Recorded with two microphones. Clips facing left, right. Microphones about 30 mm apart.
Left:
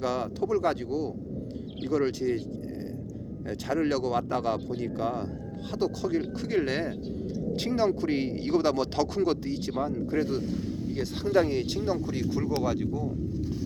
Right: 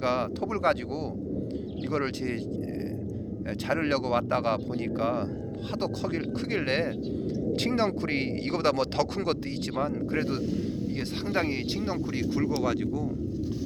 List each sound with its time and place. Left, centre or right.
0.0 s speech: right
3.5 s speech: right
7.5 s speech: right
12.3 s speech: right